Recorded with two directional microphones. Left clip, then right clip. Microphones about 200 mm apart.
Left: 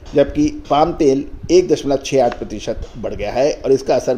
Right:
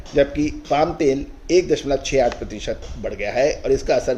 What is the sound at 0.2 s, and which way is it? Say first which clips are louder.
A man's voice: left 3 dB; 30° left (ahead or behind).